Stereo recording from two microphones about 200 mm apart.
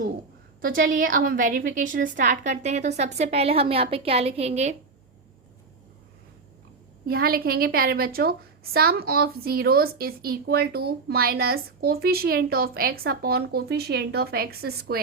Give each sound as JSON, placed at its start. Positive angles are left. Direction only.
{"t": 0.8, "sound": "a woman's voice", "side_deg": -45}
{"t": 7.0, "sound": "a woman's voice", "side_deg": -50}